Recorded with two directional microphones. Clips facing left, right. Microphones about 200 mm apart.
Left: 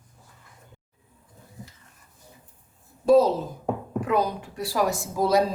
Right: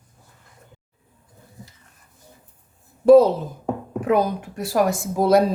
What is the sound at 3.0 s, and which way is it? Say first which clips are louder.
A woman's voice: right 6 dB; 60° right (ahead or behind).